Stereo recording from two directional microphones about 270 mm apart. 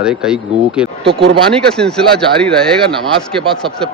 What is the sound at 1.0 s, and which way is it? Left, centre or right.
Speech, right.